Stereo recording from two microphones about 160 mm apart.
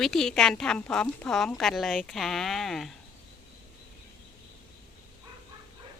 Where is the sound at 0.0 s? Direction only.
Centre (ahead or behind).